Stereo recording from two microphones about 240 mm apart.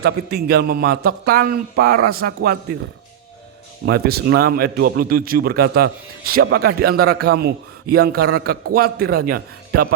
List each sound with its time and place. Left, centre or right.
0.0 s speech: right
3.8 s speech: right